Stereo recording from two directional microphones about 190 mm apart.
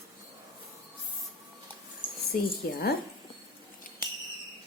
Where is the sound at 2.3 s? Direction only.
55° left (ahead or behind).